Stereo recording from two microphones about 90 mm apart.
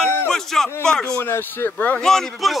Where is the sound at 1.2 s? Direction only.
25° left (ahead or behind).